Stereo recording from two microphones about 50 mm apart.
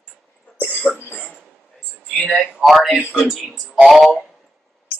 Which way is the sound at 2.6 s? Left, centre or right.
Centre.